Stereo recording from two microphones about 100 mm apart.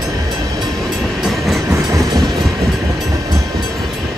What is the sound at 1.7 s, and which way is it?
Train, 35° right (ahead or behind).